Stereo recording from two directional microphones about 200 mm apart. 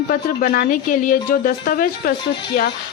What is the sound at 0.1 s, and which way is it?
Speech, 45° left (ahead or behind).